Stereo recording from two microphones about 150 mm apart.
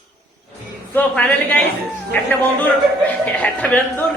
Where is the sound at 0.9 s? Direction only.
10° left (ahead or behind).